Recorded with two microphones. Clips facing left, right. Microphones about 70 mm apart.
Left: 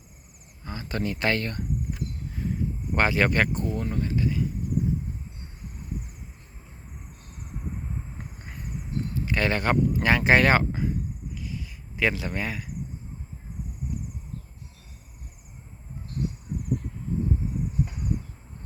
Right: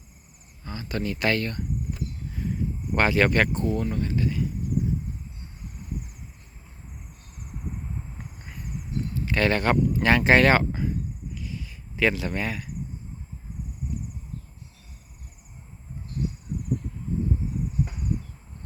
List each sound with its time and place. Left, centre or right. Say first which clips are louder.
0.6 s speech: even; left
2.9 s speech: right 2 dB; left
9.1 s speech: right 3 dB; centre
11.3 s cricket: even; left